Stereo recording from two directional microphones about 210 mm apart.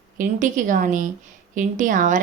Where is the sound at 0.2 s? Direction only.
40° right (ahead or behind).